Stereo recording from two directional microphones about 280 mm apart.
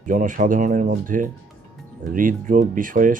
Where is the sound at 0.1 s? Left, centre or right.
Right.